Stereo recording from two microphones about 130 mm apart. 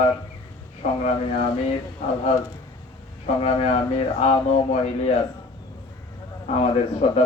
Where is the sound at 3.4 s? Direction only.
45° left (ahead or behind).